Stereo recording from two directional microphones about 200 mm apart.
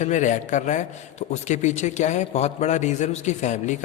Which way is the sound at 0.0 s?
40° left (ahead or behind).